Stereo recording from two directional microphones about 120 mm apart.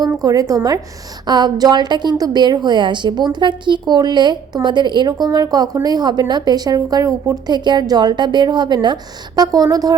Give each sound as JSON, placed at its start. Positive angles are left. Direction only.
{"t": 0.2, "sound": "a woman's voice", "side_deg": -30}